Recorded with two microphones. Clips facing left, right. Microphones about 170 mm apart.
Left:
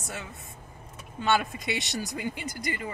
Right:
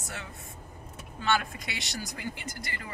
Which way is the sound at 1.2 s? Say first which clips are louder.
Left 3 dB; 20° left (ahead or behind).